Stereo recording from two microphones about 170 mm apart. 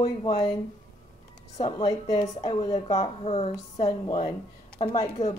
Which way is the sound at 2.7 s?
40° left (ahead or behind).